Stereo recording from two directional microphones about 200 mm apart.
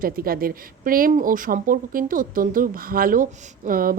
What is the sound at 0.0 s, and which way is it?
A woman's voice, 45° right (ahead or behind).